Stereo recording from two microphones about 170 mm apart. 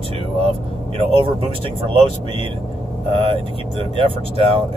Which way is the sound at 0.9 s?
30° right (ahead or behind).